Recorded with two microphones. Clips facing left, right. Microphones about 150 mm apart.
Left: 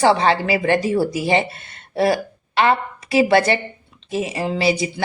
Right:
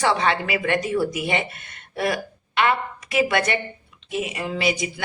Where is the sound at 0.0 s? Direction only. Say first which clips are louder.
Left 5 dB; 30° left (ahead or behind).